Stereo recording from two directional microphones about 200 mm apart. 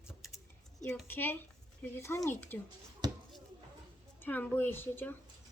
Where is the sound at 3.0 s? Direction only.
20° right (ahead or behind).